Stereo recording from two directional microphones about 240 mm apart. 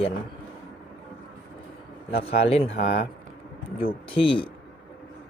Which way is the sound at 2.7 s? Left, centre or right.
Left.